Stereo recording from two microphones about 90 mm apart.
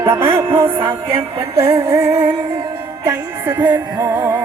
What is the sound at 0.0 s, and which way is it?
Music, 25° right (ahead or behind).